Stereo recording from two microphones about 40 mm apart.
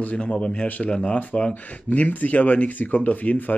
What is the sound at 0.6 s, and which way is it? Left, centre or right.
Speech, left.